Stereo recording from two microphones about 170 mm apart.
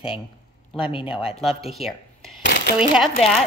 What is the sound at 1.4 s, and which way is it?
Speech, centre (ahead or behind).